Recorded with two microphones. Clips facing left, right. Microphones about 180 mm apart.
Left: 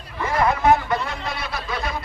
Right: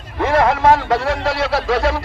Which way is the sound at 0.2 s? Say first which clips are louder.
Right 6 dB; 85° right.